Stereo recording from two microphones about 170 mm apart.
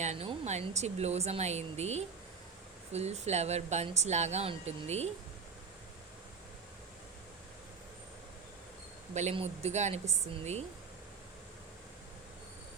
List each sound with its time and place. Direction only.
0.0 s a woman's voice: 40° right (ahead or behind)
9.1 s a woman's voice: 40° right (ahead or behind)